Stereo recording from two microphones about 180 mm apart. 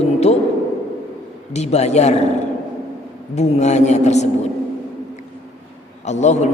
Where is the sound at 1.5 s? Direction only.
35° left (ahead or behind).